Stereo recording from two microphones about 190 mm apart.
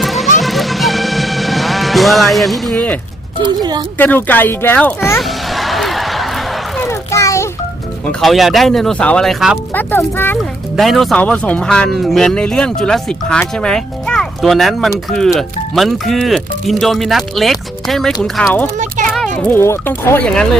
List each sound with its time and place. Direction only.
0.0 s music: centre (ahead or behind)
3.4 s speech: 20° right (ahead or behind)
3.9 s speech: 10° left (ahead or behind)
5.2 s a sound: centre (ahead or behind)
6.8 s a sound: 15° left (ahead or behind)
8.0 s speech: centre (ahead or behind)
9.7 s speech: 10° left (ahead or behind)
10.8 s speech: centre (ahead or behind)
18.8 s children playing: 40° right (ahead or behind)
19.4 s speech: 10° left (ahead or behind)